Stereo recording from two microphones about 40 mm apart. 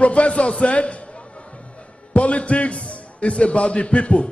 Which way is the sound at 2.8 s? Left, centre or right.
Left.